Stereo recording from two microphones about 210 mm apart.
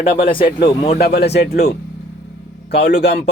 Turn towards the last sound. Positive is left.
turn(degrees=50)  # may be behind; listen again after turning